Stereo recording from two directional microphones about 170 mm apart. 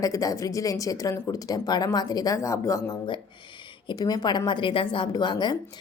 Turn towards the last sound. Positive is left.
turn(degrees=25)  # may be behind; listen again after turning